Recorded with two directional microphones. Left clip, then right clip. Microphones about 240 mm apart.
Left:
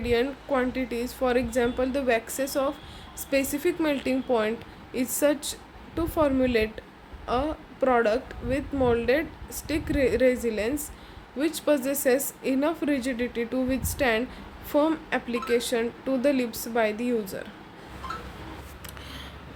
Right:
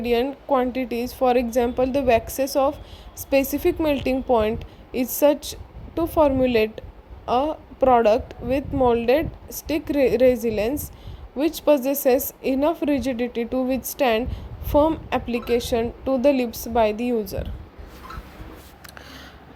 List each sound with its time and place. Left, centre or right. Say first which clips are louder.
0.0 s a woman's voice: right 3 dB; right